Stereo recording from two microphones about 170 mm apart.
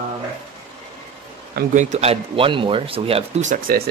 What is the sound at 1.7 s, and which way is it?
Speech, 45° right (ahead or behind).